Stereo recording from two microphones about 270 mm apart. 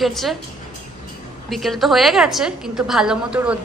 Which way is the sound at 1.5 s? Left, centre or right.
Centre.